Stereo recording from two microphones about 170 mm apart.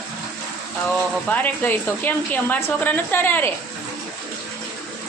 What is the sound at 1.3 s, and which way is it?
A woman's voice, 10° left (ahead or behind).